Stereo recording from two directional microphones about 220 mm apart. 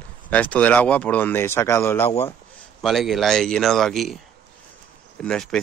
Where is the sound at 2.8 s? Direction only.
Centre (ahead or behind).